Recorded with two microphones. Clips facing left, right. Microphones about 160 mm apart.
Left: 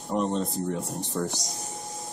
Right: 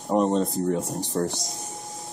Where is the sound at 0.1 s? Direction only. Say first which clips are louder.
Right 5 dB; 40° right (ahead or behind).